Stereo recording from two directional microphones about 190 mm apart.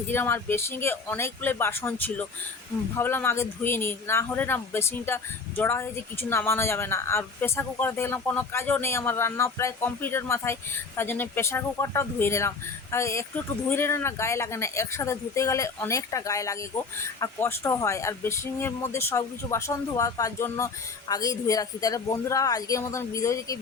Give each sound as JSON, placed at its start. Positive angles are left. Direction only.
{"t": 0.1, "sound": "speech", "side_deg": 10}